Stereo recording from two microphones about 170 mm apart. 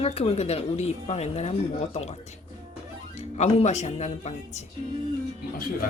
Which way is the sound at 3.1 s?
40° left (ahead or behind).